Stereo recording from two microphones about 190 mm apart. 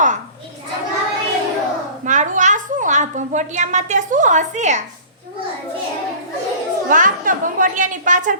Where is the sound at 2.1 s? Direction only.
40° right (ahead or behind).